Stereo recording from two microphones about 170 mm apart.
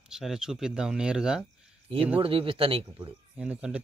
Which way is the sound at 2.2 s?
30° right (ahead or behind).